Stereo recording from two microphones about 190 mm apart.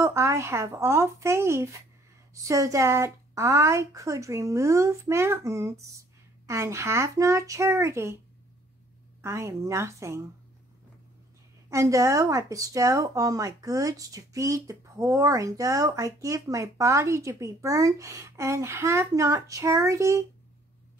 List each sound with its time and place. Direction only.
0.0 s speech: 15° right (ahead or behind)
9.2 s speech: 15° right (ahead or behind)
11.7 s speech: 15° right (ahead or behind)